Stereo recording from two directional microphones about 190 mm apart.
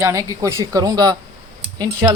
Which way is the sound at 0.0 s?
15° right (ahead or behind).